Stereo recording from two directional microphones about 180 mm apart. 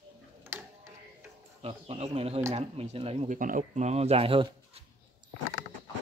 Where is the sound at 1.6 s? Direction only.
35° right (ahead or behind).